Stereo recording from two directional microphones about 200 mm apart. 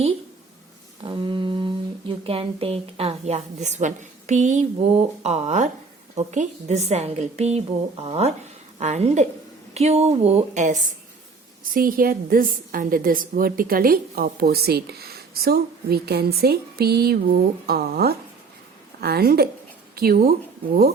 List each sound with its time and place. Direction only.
1.0 s a woman's voice: 25° right (ahead or behind); by 20.3 s 50° right (ahead or behind)